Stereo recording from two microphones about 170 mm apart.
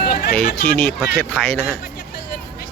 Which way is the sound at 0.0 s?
65° left (ahead or behind).